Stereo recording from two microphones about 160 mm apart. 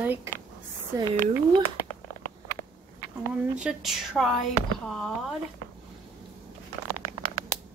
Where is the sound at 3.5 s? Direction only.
5° right (ahead or behind).